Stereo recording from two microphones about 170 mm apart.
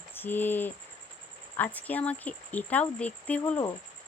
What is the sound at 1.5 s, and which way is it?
Speech, 10° left (ahead or behind).